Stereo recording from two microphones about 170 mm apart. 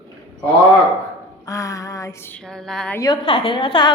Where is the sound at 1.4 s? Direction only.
20° left (ahead or behind).